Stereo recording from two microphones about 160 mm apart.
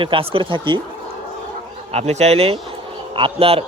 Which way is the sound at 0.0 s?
35° right (ahead or behind).